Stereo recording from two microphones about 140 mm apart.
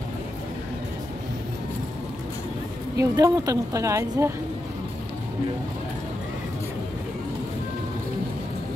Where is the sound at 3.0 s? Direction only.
25° right (ahead or behind).